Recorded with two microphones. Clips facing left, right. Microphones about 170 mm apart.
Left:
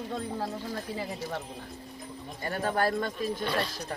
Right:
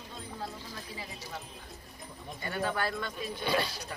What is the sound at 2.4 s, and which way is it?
Speech, 40° left (ahead or behind).